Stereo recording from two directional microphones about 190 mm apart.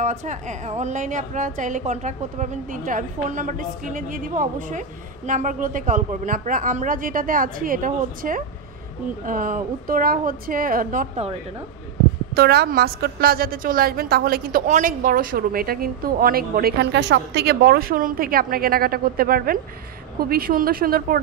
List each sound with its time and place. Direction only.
0.0 s a woman's voice: 40° right (ahead or behind)
12.4 s a woman's voice: 55° right (ahead or behind)